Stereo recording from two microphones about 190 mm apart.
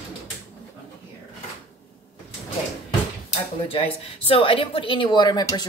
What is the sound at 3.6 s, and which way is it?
Speech, 30° left (ahead or behind).